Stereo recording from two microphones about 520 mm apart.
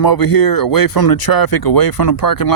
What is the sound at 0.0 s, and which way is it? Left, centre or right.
Speech, left.